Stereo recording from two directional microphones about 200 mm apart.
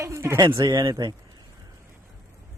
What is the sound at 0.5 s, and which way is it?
Speech, 20° right (ahead or behind).